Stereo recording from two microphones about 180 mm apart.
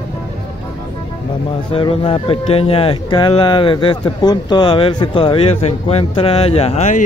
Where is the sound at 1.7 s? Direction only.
30° left (ahead or behind).